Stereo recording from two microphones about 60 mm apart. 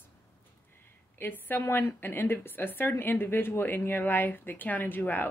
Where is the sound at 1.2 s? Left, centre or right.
Left.